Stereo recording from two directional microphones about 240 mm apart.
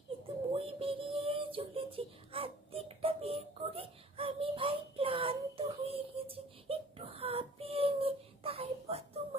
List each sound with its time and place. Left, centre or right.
0.5 s music: right